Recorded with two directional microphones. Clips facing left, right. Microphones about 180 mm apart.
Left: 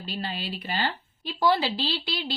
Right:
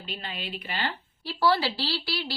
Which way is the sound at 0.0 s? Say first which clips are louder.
Left 4 dB; 35° left (ahead or behind).